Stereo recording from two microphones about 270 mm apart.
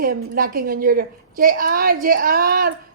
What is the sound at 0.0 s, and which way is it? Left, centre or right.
A woman's voice, right.